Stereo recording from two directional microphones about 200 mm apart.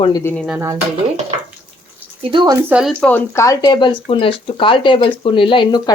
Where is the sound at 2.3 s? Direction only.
20° right (ahead or behind); by 3.2 s centre (ahead or behind).